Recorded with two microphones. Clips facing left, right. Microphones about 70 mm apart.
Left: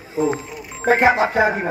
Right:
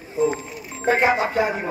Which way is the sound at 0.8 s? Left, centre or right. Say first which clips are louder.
Left 4 dB; left.